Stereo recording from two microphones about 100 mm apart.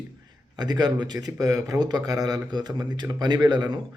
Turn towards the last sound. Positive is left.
turn(degrees=-45)  # may be behind; listen again after turning